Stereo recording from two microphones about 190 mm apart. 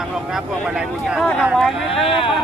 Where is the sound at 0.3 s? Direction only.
Centre (ahead or behind).